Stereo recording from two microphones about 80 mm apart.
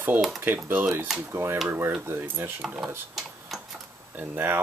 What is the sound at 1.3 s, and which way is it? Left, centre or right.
Speech, right.